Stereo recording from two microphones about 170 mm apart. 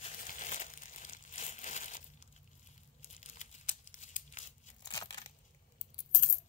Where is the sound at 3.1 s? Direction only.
45° left (ahead or behind).